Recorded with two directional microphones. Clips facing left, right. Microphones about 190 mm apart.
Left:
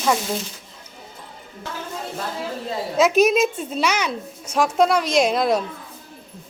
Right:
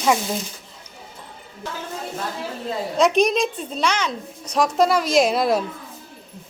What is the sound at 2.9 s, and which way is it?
A woman's voice, 5° left (ahead or behind).